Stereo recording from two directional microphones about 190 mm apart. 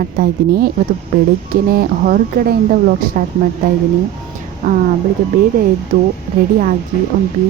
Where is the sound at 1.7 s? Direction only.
50° right (ahead or behind).